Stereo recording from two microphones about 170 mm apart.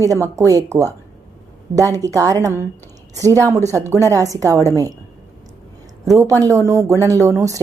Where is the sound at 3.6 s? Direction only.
15° right (ahead or behind).